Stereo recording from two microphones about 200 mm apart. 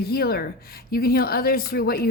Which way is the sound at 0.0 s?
50° left (ahead or behind).